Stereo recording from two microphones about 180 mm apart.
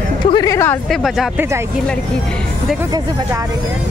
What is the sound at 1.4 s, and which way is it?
Speech, 15° right (ahead or behind).